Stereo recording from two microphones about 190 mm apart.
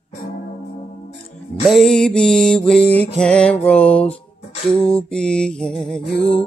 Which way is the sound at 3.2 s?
5° left (ahead or behind).